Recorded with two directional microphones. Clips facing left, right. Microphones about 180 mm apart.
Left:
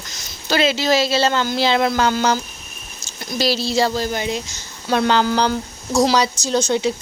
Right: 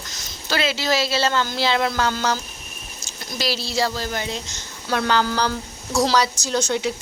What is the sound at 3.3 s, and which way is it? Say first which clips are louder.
A woman's voice: left 6 dB; 30° left (ahead or behind).